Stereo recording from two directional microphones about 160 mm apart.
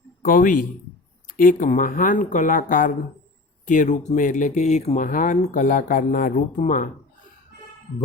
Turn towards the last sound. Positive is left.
turn(degrees=55)  # may be behind; listen again after turning